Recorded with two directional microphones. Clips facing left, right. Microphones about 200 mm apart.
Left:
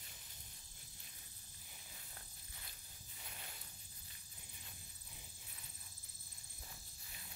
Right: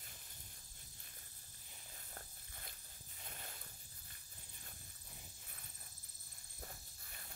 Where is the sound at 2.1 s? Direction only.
50° right (ahead or behind).